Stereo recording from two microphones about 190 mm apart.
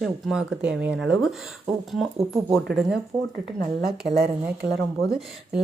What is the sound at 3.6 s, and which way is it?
Speech, 55° right (ahead or behind).